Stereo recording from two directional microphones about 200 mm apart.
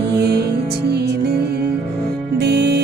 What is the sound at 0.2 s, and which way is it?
Music, 55° right (ahead or behind).